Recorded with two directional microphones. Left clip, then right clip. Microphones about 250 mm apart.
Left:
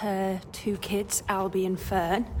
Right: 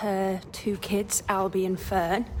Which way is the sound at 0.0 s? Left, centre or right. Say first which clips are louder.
Right 2 dB; centre.